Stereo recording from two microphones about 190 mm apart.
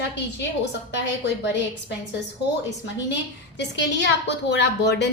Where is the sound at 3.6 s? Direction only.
65° left (ahead or behind).